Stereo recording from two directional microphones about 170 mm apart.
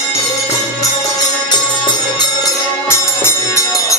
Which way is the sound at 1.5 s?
25° left (ahead or behind).